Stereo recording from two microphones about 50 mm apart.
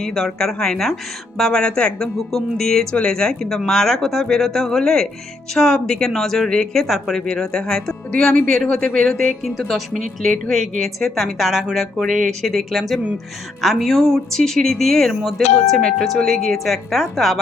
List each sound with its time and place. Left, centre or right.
0.0 s speech: centre
6.8 s speech: centre
7.2 s speech: centre
9.0 s speech: centre